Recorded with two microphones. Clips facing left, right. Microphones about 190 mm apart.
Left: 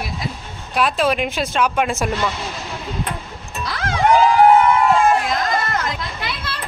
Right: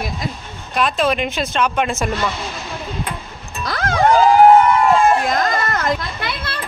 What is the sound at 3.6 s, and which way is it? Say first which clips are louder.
Music: right 4 dB; 45° right (ahead or behind).